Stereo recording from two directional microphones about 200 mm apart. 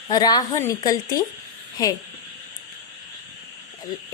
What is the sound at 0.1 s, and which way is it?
A woman's voice, 20° left (ahead or behind).